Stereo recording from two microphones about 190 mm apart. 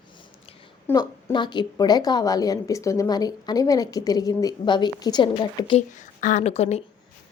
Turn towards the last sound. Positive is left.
turn(degrees=35)  # may be behind; listen again after turning